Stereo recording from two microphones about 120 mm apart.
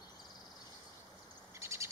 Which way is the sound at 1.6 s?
25° right (ahead or behind).